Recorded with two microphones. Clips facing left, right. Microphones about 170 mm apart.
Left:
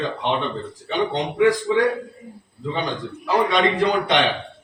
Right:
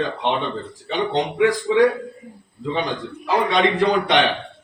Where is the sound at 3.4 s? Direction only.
20° right (ahead or behind).